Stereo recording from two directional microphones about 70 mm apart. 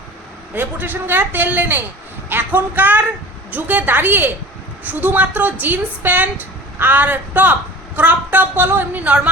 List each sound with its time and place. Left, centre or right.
0.5 s a woman's voice: right